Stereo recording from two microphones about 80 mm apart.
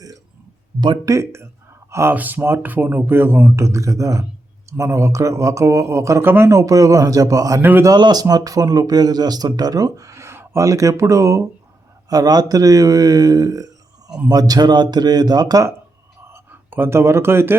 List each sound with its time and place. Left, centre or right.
1.0 s speech: right
2.1 s speech: right
6.2 s speech: right
6.5 s speech: right
7.6 s speech: right
7.9 s speech: right
12.0 s speech: right
16.3 s speech: right